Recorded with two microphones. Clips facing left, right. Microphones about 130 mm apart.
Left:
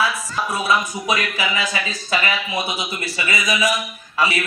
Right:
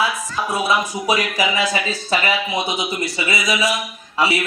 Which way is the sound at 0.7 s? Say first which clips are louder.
Even; 10° right (ahead or behind).